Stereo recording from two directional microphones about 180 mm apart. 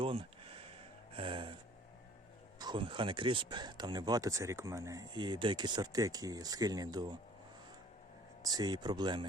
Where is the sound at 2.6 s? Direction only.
25° right (ahead or behind).